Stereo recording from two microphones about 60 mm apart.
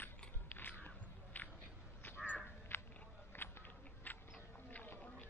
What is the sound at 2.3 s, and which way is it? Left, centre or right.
Crow, left.